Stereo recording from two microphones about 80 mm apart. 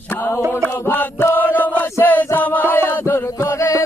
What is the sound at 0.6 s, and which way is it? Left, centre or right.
Chant, left.